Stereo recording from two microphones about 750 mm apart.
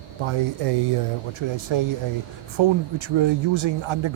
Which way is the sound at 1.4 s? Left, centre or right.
Right.